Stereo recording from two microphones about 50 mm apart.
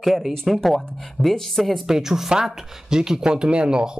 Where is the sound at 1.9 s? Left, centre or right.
Centre.